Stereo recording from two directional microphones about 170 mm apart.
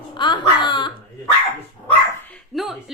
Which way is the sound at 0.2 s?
25° left (ahead or behind).